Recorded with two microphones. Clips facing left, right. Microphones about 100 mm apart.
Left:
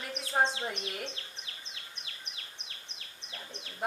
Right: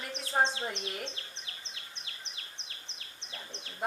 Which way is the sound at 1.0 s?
25° right (ahead or behind).